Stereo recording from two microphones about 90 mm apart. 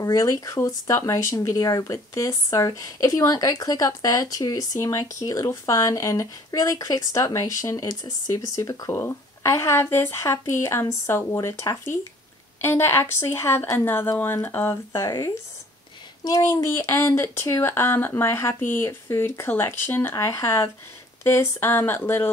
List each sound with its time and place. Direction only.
0.0 s speech: 40° left (ahead or behind)